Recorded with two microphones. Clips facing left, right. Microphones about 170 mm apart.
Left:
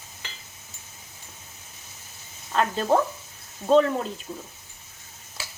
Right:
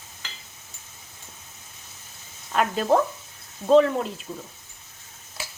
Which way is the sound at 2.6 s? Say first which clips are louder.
Right 1 dB; centre (ahead or behind).